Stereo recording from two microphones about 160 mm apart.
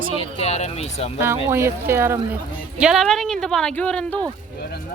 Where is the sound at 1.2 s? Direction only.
15° right (ahead or behind).